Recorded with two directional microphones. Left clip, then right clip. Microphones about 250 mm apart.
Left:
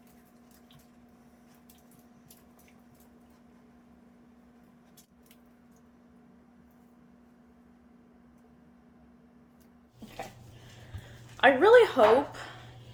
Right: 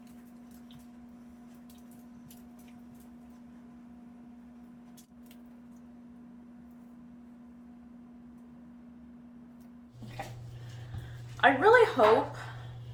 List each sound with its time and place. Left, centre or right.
11.3 s speech: left